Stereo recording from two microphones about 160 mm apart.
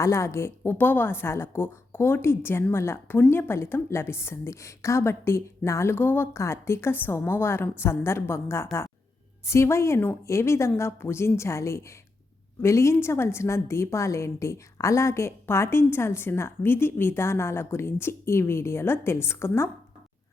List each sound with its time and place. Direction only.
0.0 s a woman's voice: 20° left (ahead or behind)